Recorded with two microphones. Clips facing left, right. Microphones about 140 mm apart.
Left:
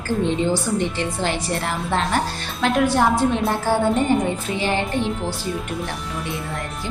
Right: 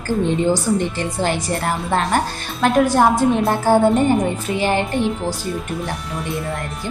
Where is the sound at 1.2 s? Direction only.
45° right (ahead or behind).